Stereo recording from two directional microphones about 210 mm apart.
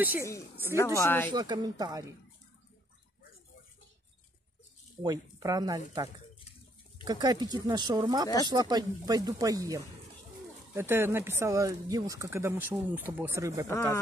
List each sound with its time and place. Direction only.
0.2 s speech: 15° left (ahead or behind)
1.3 s speech: 20° right (ahead or behind)
5.0 s speech: 20° right (ahead or behind)
7.1 s speech: 20° right (ahead or behind)
13.7 s speech: 10° left (ahead or behind)